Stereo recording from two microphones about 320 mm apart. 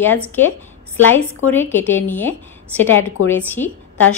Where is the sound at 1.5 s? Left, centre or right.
Centre.